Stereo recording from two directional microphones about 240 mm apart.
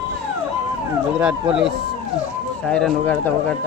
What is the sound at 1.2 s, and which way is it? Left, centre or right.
Speech, centre.